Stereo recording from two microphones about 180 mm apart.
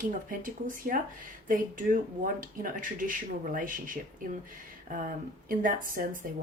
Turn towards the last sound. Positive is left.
turn(degrees=-50)  # may be behind; listen again after turning